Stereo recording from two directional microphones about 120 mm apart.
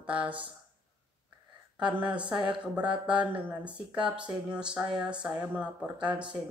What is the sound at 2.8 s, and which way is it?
Speech, 40° right (ahead or behind).